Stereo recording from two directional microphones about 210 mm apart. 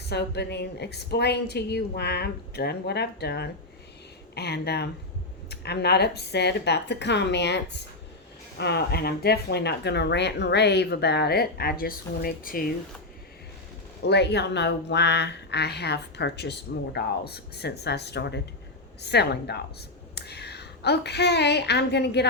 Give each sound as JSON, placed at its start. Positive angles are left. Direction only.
{"t": 0.0, "sound": "speech", "side_deg": 50}
{"t": 14.0, "sound": "a woman's voice", "side_deg": 55}